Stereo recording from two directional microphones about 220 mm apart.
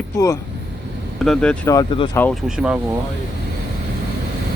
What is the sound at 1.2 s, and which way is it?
Speech, 5° left (ahead or behind).